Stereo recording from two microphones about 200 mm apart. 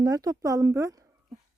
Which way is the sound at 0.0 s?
20° right (ahead or behind).